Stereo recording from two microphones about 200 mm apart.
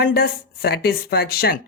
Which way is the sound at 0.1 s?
50° left (ahead or behind).